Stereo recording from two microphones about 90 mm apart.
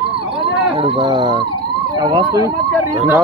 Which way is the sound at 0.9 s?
60° right (ahead or behind).